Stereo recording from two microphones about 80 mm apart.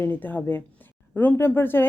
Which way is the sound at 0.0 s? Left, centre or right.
Left.